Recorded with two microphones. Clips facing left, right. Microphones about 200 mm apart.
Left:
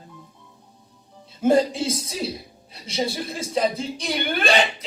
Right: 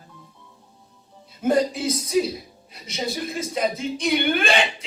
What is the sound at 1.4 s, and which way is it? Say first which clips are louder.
A woman's voice: left 2 dB; 25° left (ahead or behind).